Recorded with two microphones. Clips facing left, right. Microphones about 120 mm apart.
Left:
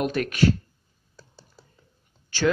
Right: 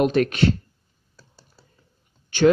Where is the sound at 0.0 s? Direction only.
25° right (ahead or behind).